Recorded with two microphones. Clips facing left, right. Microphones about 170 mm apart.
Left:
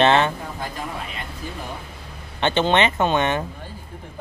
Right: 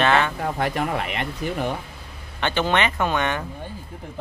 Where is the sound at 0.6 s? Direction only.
75° right (ahead or behind).